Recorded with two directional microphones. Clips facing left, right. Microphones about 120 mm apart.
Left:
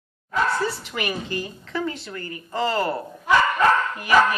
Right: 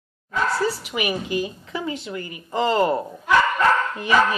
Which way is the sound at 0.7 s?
10° right (ahead or behind).